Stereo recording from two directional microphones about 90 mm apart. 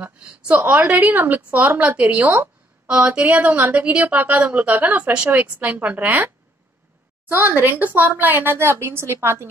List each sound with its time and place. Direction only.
0.0 s a sound: 15° right (ahead or behind)
0.7 s a woman's voice: 15° right (ahead or behind)
7.2 s speech: 20° right (ahead or behind)